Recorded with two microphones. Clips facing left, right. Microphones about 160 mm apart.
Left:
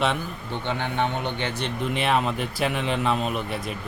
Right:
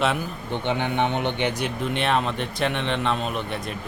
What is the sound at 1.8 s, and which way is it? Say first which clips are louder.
Speech: left 1 dB; centre (ahead or behind).